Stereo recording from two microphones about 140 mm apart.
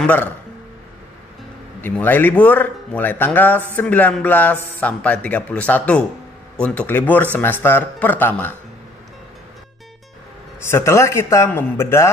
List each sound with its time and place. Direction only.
0.0 s speech: 10° left (ahead or behind)
1.8 s a man's voice: 15° left (ahead or behind)
10.7 s speech: 20° left (ahead or behind)